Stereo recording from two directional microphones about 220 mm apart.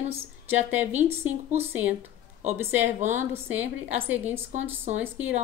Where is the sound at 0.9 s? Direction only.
30° right (ahead or behind).